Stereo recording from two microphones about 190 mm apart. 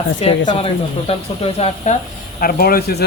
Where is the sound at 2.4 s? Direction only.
50° left (ahead or behind).